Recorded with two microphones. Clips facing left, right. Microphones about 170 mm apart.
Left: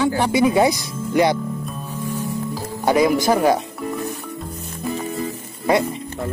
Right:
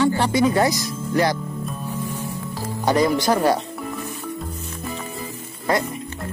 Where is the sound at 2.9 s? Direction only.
10° left (ahead or behind).